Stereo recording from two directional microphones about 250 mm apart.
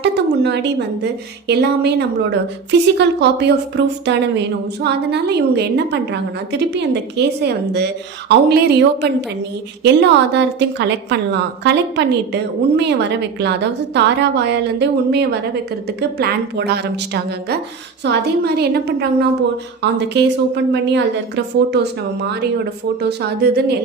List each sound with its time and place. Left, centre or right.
0.0 s a sound: right
1.5 s a woman's voice: right
18.0 s a woman's voice: right